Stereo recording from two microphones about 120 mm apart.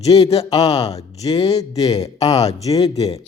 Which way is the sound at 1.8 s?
35° left (ahead or behind).